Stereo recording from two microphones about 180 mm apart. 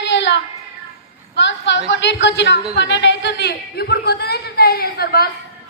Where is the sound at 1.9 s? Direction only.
85° left; by 5.3 s 60° left (ahead or behind).